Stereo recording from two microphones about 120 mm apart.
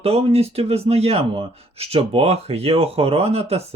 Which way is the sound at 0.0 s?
55° right (ahead or behind).